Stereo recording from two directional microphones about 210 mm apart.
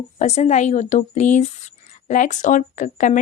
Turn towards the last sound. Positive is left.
turn(degrees=40)  # may be behind; listen again after turning